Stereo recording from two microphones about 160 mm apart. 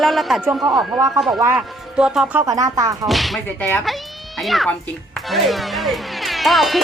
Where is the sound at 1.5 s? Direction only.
5° right (ahead or behind).